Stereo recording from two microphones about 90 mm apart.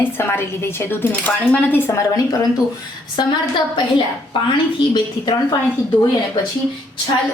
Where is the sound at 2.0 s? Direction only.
40° left (ahead or behind).